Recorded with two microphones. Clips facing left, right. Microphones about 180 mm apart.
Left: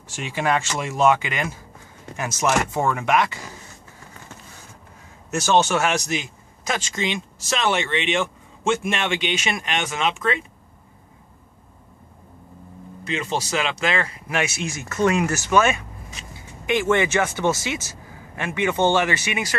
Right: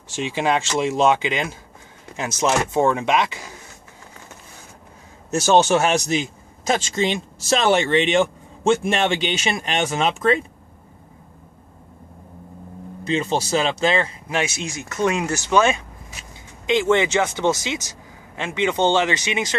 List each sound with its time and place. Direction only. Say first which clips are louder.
0.1 s speech: right 2 dB; 25° right (ahead or behind)
5.3 s speech: right 3 dB; 35° right (ahead or behind)
13.0 s speech: right 4 dB; 30° right (ahead or behind)